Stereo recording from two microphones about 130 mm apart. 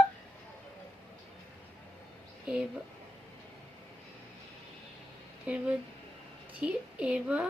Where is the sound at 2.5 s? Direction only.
5° right (ahead or behind).